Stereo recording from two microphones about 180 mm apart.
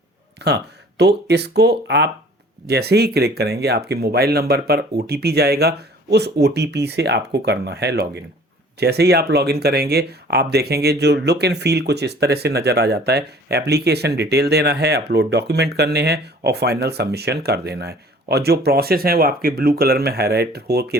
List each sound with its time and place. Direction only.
0.3 s speech: 70° right (ahead or behind)